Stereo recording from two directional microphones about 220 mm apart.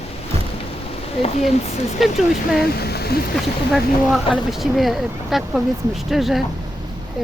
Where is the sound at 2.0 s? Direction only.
Centre (ahead or behind).